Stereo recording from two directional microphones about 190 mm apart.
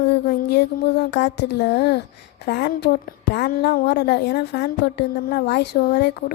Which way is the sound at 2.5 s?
60° left (ahead or behind).